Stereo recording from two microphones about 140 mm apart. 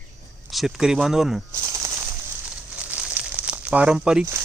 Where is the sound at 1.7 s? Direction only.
20° right (ahead or behind).